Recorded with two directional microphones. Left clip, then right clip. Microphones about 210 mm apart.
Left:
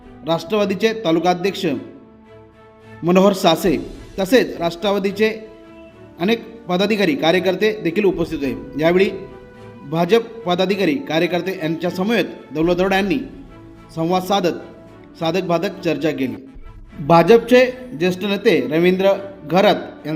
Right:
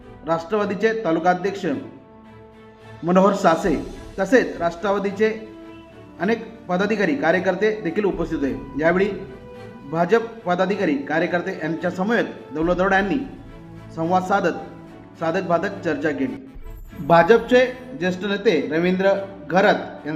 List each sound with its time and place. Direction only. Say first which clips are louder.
0.3 s a man's voice: left 3 dB; 35° left (ahead or behind)
3.1 s a man's voice: left 2 dB; 35° left (ahead or behind)